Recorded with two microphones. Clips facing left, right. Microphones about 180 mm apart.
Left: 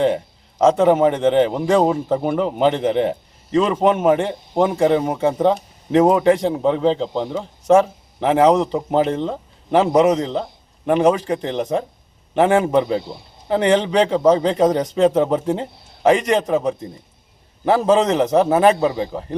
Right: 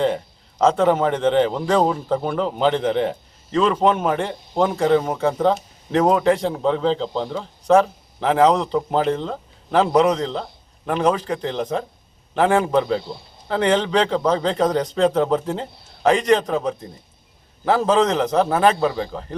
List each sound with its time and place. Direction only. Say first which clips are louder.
0.6 s a man's voice: left 3 dB; 15° left (ahead or behind)